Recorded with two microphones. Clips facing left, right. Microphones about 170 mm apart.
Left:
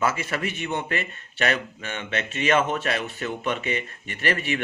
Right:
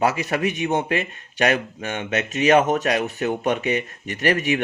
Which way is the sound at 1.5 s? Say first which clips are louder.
Right 5 dB; 45° right (ahead or behind).